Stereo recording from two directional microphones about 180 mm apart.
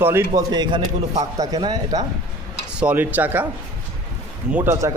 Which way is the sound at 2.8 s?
10° right (ahead or behind).